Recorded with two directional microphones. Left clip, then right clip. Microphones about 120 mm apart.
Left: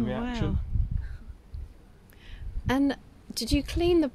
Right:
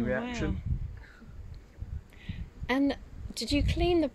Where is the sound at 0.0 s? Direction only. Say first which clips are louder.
Right 1 dB; 75° left (ahead or behind).